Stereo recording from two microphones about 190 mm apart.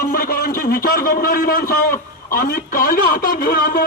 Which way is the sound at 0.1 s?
50° left (ahead or behind).